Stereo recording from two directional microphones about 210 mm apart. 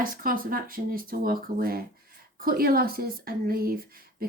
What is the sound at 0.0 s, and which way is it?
Speech, 40° right (ahead or behind).